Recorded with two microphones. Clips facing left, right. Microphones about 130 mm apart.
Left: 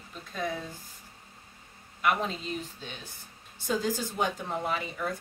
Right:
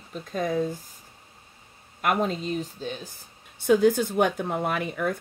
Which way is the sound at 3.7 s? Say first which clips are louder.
Right 10 dB; 60° right (ahead or behind).